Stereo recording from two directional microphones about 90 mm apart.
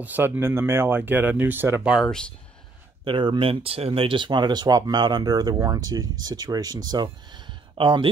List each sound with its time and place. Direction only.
0.0 s speech: 20° right (ahead or behind)
2.0 s speech: 10° left (ahead or behind)
3.1 s speech: 65° right (ahead or behind); by 7.1 s 50° right (ahead or behind)
7.7 s speech: 70° right (ahead or behind)